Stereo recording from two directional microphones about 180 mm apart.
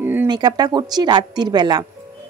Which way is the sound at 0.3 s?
25° right (ahead or behind).